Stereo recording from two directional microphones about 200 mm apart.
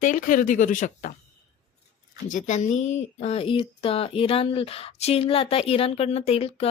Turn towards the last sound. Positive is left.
turn(degrees=30)  # may be behind; listen again after turning